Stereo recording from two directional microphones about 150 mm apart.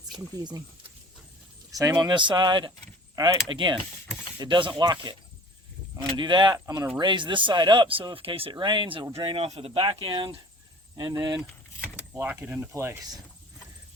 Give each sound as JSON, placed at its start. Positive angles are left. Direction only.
{"t": 0.1, "sound": "speech", "side_deg": -30}
{"t": 1.7, "sound": "speech", "side_deg": -25}
{"t": 12.1, "sound": "speech", "side_deg": -15}